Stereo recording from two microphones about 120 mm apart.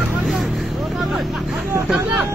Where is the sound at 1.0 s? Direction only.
5° right (ahead or behind).